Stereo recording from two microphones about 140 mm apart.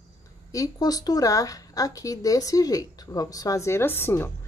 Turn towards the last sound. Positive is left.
turn(degrees=15)  # may be behind; listen again after turning